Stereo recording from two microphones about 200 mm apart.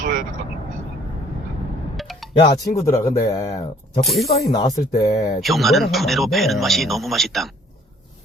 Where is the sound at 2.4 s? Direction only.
20° left (ahead or behind).